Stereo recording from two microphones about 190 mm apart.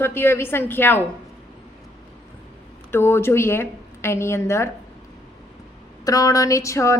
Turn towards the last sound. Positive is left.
turn(degrees=15)  # may be behind; listen again after turning